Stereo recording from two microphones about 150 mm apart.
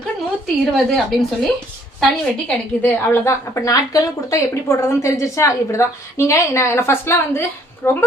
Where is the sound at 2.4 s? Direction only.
15° left (ahead or behind).